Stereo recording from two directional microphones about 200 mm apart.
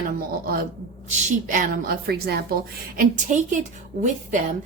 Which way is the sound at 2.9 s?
40° right (ahead or behind).